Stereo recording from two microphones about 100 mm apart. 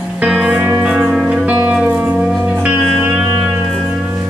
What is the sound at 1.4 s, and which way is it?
Music, 15° right (ahead or behind).